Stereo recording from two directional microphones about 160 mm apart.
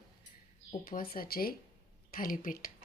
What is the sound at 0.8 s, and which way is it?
Speech, 65° left (ahead or behind).